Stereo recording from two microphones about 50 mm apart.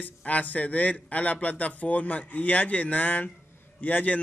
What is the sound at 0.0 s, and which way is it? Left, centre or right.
A man's voice, left.